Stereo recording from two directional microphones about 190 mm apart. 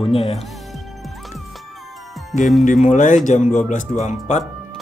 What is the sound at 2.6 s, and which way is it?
Speech, 40° left (ahead or behind).